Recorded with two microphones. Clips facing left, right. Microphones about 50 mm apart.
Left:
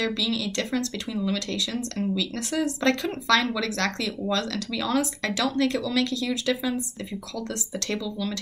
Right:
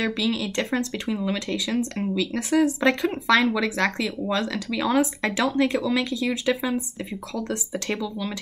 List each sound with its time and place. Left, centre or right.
0.0 s speech: right